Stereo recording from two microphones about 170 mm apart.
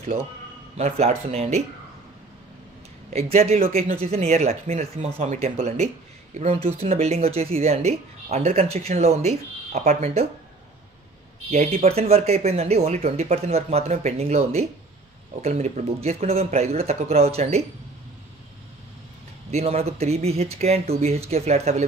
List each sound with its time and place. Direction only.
0.7 s speech: 40° right (ahead or behind)
3.1 s speech: 40° right (ahead or behind)
11.5 s speech: 40° right (ahead or behind)
19.5 s speech: 40° right (ahead or behind)